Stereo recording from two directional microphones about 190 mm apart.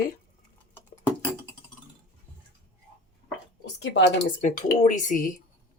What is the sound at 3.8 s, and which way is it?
Speech, 65° left (ahead or behind).